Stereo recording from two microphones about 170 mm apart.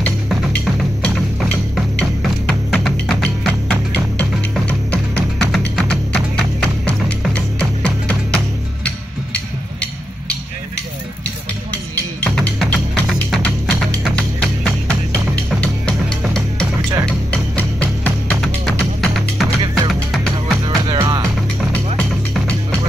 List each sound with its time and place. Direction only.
0.0 s music: 5° left (ahead or behind)
11.7 s music: 10° left (ahead or behind)
20.6 s music: 25° right (ahead or behind)
22.3 s music: 5° left (ahead or behind)